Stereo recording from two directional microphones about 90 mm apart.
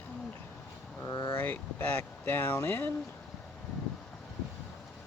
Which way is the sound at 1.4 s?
20° left (ahead or behind).